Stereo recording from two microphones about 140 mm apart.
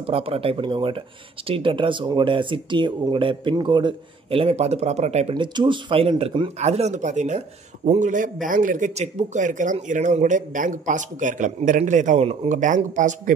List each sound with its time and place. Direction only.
0.0 s speech: 40° right (ahead or behind)
5.3 s speech: 35° right (ahead or behind)
6.6 s a man's voice: 50° right (ahead or behind)